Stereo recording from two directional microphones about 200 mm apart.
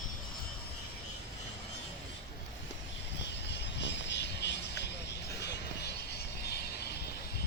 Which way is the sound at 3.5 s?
60° left (ahead or behind).